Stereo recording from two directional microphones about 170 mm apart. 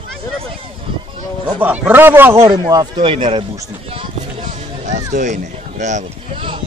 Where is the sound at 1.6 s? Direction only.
10° right (ahead or behind).